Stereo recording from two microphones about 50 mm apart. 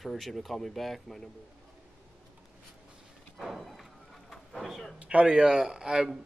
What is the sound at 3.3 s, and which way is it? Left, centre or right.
Thump, centre.